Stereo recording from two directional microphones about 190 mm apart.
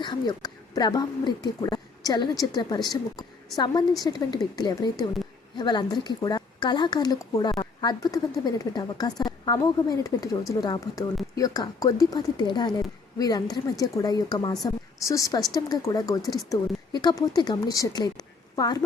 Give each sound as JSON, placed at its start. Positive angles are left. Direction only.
{"t": 0.0, "sound": "a woman's voice", "side_deg": 20}